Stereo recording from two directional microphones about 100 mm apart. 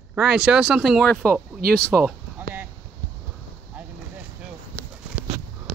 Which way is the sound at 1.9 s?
15° right (ahead or behind).